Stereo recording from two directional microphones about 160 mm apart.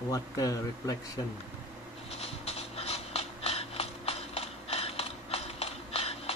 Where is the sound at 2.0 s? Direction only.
40° left (ahead or behind).